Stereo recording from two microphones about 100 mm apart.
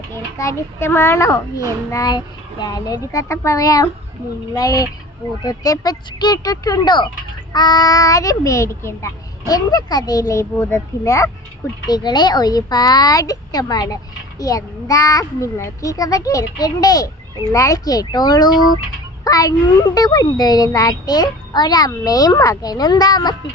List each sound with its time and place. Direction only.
0.1 s a child's voice: 30° left (ahead or behind)
9.5 s a woman's voice: 40° left (ahead or behind)
11.9 s a woman's voice: 45° left (ahead or behind)